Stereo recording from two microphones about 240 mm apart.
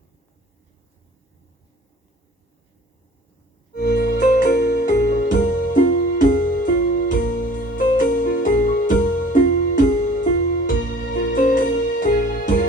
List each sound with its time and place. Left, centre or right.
3.7 s music: left